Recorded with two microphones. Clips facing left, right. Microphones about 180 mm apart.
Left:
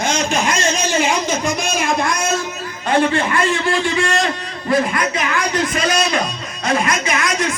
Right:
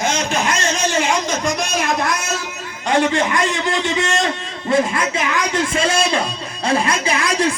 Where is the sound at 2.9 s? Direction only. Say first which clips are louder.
Even; 15° right (ahead or behind).